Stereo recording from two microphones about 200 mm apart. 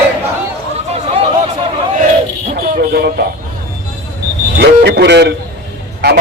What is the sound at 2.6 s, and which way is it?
Vehicle, 50° right (ahead or behind).